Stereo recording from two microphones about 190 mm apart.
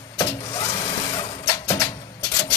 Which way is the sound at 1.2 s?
15° left (ahead or behind).